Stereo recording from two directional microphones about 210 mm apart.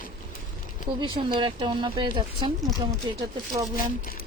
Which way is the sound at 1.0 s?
25° right (ahead or behind).